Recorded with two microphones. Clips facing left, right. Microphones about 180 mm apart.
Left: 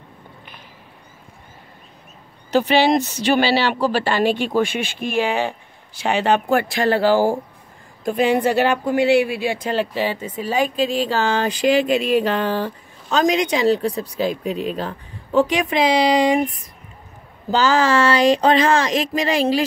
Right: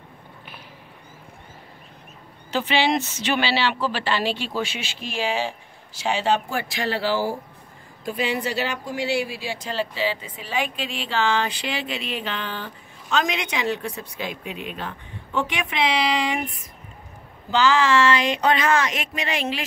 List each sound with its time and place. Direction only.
2.5 s speech: 40° left (ahead or behind)